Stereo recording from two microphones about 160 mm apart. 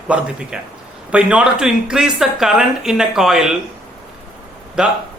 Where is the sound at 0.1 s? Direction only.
5° right (ahead or behind).